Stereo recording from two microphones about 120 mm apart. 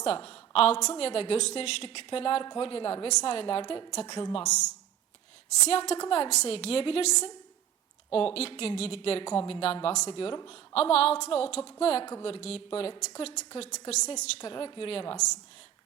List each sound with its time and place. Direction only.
0.0 s a woman's voice: 50° left (ahead or behind)
4.4 s a woman's voice: 75° left (ahead or behind)
5.7 s a woman's voice: 65° left (ahead or behind)
9.8 s a woman's voice: 70° left (ahead or behind)
10.1 s a woman's voice: 50° left (ahead or behind)
13.7 s a woman's voice: 70° left (ahead or behind)
14.2 s speech: 50° left (ahead or behind)